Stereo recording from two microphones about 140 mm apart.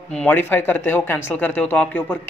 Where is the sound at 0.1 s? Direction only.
10° left (ahead or behind).